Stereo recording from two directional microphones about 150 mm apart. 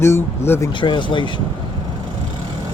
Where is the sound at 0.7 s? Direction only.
35° left (ahead or behind).